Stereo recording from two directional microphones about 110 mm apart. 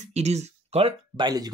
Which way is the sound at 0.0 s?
85° right.